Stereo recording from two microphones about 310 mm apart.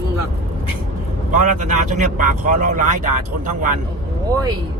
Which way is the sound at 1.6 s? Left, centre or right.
Right.